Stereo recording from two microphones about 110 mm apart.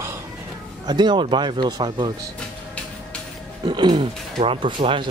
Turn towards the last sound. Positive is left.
turn(degrees=-50)  # may be behind; listen again after turning